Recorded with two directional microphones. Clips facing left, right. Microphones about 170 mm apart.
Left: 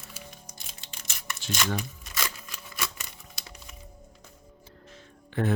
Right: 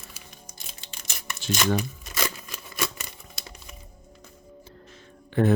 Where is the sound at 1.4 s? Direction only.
25° right (ahead or behind).